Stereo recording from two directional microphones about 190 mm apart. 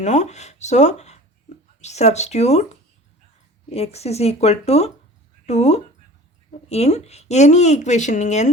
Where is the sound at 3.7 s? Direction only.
35° left (ahead or behind).